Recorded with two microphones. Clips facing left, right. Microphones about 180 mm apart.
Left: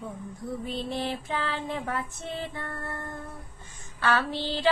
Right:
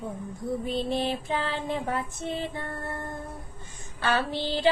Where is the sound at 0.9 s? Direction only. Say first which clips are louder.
Right 3 dB; 20° right (ahead or behind).